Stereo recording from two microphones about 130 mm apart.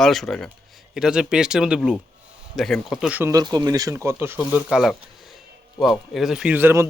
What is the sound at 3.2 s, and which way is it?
Speech, 25° right (ahead or behind).